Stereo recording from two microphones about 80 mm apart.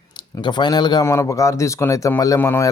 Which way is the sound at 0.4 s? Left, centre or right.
Left.